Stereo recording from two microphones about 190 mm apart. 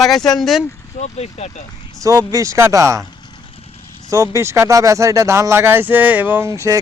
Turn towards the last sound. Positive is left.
turn(degrees=-15)  # may be behind; listen again after turning